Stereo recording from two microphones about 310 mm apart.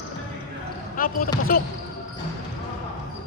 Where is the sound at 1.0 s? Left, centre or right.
Left.